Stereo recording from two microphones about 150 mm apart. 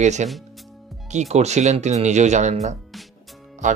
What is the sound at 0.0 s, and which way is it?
Speech, 50° right (ahead or behind).